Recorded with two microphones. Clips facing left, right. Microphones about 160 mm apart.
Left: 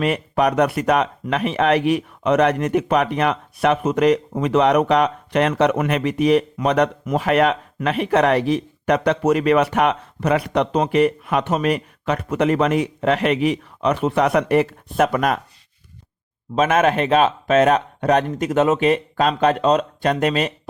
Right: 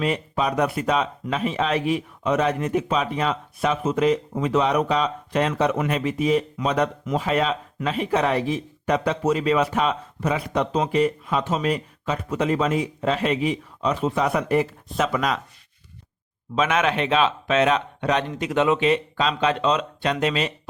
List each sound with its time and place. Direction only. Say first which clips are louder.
0.0 s speech: left 5 dB; 65° left (ahead or behind)
16.6 s speech: left 5 dB; 45° left (ahead or behind)